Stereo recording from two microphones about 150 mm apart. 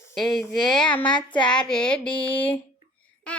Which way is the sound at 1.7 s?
5° left (ahead or behind).